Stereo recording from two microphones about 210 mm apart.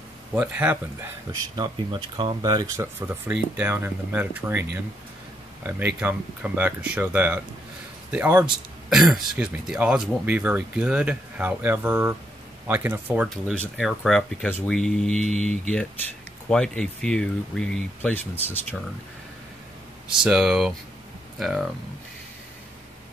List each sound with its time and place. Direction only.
0.3 s speech: 5° right (ahead or behind)
5.7 s speech: 10° right (ahead or behind); by 18.8 s 10° left (ahead or behind)
20.2 s speech: 5° right (ahead or behind)